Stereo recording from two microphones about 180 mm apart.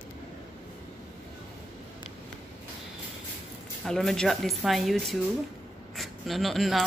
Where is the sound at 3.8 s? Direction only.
Centre (ahead or behind).